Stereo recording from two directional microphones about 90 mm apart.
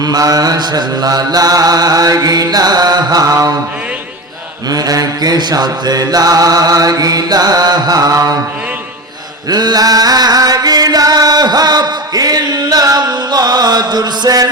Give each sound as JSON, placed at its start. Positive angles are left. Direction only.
{"t": 0.0, "sound": "mantra", "side_deg": -45}
{"t": 4.7, "sound": "mantra", "side_deg": -45}
{"t": 9.5, "sound": "chant", "side_deg": -50}